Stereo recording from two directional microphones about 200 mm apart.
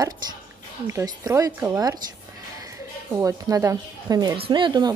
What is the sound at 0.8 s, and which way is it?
Speech, 15° right (ahead or behind).